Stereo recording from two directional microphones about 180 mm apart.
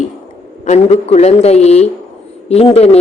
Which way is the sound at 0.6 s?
35° left (ahead or behind).